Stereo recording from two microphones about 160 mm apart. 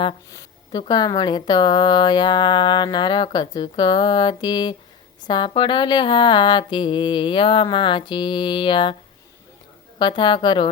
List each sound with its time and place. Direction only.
0.3 s speech: 25° left (ahead or behind)
5.3 s a sound: 30° left (ahead or behind)
10.0 s speech: 30° left (ahead or behind)